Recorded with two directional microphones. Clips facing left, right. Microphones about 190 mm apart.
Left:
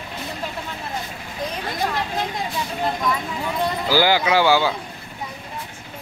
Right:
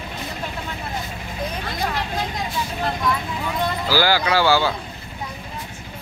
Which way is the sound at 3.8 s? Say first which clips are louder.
Left 2 dB; 20° left (ahead or behind).